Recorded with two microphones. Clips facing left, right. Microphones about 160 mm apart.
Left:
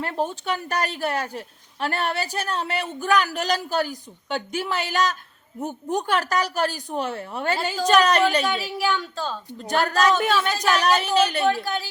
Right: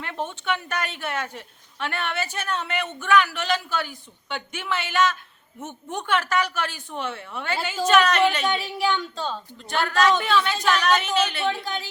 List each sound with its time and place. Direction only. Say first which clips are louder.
0.0 s a woman's voice: left 4 dB; 40° left (ahead or behind)
8.4 s a woman's voice: even; 5° left (ahead or behind)
9.6 s a woman's voice: left 2 dB; 40° left (ahead or behind)
11.4 s a woman's voice: left 4 dB; 5° left (ahead or behind)